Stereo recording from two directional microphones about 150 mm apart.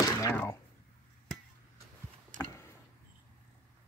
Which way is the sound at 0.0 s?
20° left (ahead or behind).